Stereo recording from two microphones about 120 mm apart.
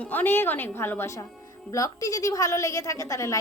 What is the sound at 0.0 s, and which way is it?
A woman's voice, 15° left (ahead or behind).